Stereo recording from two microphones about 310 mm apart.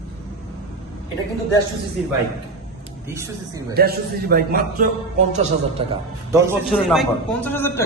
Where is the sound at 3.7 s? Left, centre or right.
Right.